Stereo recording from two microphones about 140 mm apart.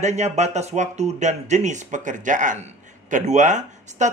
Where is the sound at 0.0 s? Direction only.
55° right (ahead or behind).